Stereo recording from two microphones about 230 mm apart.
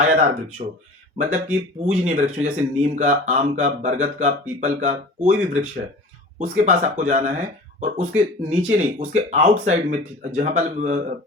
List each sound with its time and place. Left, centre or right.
0.0 s speech: right
1.8 s speech: right